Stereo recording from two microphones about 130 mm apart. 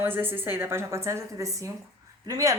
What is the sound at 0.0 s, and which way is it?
A woman's voice, 15° right (ahead or behind).